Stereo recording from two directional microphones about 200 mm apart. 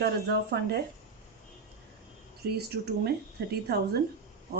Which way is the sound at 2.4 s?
55° right (ahead or behind).